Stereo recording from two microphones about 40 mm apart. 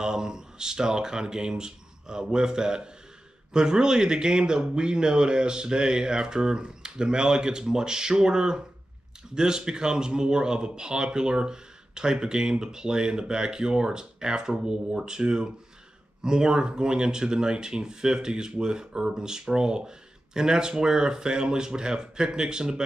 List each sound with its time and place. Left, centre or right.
0.0 s speech: centre